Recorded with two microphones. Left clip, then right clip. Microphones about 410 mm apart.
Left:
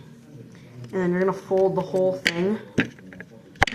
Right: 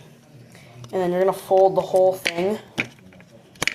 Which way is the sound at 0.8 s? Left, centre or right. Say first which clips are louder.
Right 3 dB; centre.